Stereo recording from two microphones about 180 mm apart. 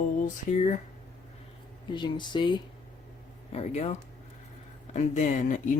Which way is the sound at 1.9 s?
25° left (ahead or behind).